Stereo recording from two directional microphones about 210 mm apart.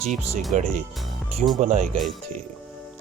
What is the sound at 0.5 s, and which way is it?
Speech, 35° right (ahead or behind).